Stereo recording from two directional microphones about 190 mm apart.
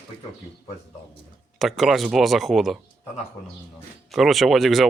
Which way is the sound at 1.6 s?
Centre (ahead or behind).